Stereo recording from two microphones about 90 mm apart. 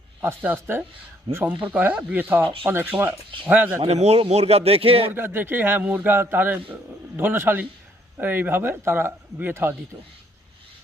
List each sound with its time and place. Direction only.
0.2 s a man's voice: 25° right (ahead or behind)
4.2 s speech: 90° right
5.1 s a man's voice: 25° right (ahead or behind)